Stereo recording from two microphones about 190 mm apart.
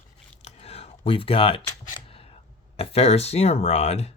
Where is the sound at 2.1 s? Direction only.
30° left (ahead or behind).